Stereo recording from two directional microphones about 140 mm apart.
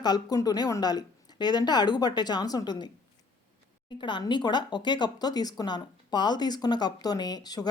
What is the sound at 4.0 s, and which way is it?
Speech, 35° left (ahead or behind).